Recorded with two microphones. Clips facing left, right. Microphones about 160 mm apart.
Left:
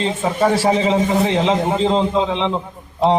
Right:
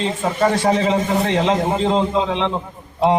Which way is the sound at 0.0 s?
Centre (ahead or behind).